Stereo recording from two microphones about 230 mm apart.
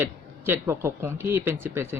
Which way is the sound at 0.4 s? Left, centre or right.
Centre.